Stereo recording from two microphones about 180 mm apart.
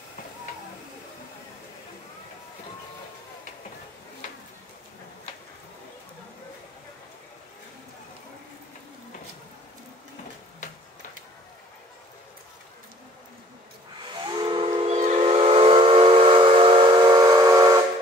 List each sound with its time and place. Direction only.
14.1 s steam whistle: 25° right (ahead or behind)